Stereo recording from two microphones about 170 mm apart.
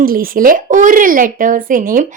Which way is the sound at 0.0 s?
60° right (ahead or behind).